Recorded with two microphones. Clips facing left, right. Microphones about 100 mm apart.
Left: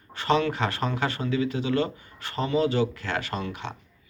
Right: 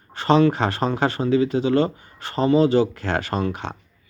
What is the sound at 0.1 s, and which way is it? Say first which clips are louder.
Speech: right 7 dB; 30° right (ahead or behind).